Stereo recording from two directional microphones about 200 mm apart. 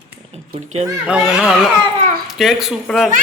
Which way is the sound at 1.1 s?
5° right (ahead or behind).